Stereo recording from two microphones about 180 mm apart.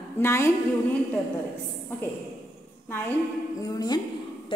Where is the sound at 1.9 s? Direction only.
10° left (ahead or behind).